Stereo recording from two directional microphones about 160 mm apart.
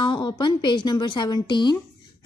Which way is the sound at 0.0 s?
30° left (ahead or behind).